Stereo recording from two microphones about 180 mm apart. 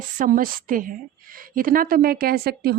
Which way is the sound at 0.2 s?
50° right (ahead or behind).